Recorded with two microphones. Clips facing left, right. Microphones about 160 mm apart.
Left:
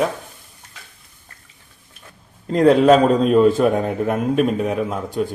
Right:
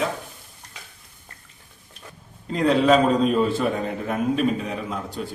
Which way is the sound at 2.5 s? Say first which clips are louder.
Left 5 dB; 45° left (ahead or behind).